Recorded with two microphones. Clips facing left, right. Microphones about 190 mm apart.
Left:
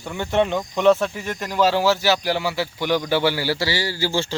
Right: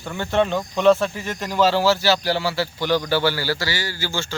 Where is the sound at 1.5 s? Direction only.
15° left (ahead or behind).